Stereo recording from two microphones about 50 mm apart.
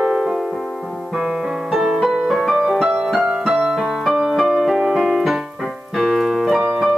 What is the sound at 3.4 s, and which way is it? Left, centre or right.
Piano, centre.